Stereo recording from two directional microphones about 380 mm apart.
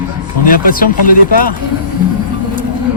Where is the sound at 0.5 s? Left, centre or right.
Left.